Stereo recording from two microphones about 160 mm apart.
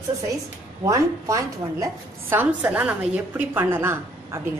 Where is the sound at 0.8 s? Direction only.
20° right (ahead or behind).